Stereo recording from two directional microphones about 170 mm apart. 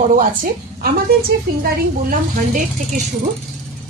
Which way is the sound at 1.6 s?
55° right (ahead or behind).